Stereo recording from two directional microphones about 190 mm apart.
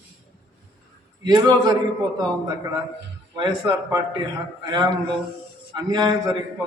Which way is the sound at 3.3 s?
20° right (ahead or behind).